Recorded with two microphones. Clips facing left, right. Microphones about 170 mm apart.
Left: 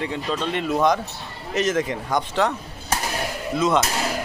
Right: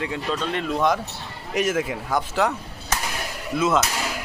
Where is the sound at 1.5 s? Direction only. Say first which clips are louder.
Left 1 dB; 10° right (ahead or behind).